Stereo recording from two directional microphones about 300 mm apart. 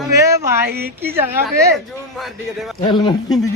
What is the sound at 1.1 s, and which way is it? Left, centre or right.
A man's voice, centre.